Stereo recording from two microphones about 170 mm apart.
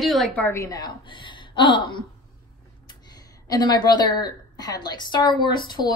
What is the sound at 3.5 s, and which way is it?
A woman's voice, 25° left (ahead or behind).